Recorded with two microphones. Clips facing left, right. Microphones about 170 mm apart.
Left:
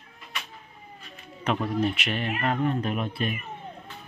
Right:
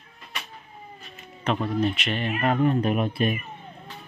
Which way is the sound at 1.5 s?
10° left (ahead or behind).